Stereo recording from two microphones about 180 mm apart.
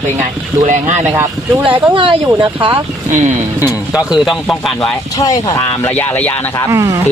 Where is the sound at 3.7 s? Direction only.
Centre (ahead or behind).